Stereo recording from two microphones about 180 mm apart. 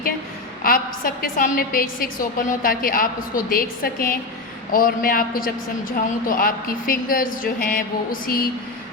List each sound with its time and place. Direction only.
0.6 s a woman's voice: 50° left (ahead or behind)